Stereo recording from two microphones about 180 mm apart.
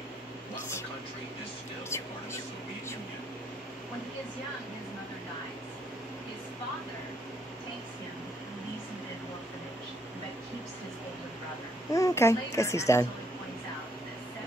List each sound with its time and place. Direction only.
11.9 s a child's voice: 15° left (ahead or behind)